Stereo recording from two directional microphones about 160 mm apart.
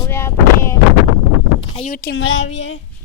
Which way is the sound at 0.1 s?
15° left (ahead or behind).